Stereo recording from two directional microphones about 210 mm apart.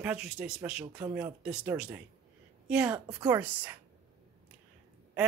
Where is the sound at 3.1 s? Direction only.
20° right (ahead or behind).